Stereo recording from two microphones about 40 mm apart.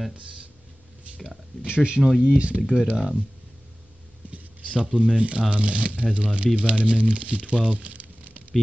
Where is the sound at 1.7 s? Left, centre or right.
Right.